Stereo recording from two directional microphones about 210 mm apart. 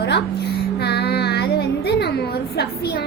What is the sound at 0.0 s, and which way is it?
Music, 50° left (ahead or behind).